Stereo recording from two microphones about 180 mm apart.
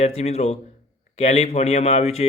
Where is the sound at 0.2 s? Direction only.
35° left (ahead or behind).